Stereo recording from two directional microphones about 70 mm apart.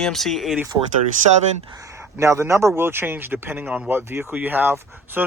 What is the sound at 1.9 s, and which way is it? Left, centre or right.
Speech, right.